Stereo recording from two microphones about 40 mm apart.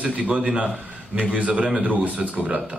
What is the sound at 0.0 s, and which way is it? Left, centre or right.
A man's voice, right.